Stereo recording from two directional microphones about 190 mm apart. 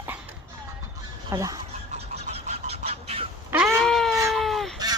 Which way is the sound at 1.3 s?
20° right (ahead or behind).